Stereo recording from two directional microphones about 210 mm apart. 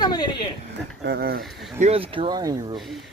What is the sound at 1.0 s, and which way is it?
Speech, 50° right (ahead or behind).